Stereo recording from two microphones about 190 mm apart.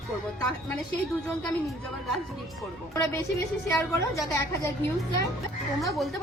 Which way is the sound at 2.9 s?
15° left (ahead or behind).